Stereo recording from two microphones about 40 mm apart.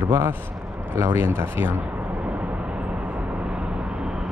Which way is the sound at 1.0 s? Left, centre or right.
Right.